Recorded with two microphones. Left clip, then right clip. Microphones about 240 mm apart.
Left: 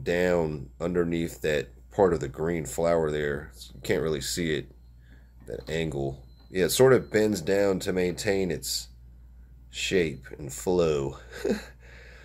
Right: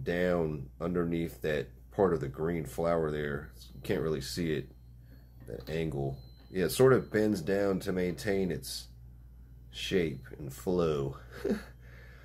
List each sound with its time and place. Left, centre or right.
0.0 s speech: left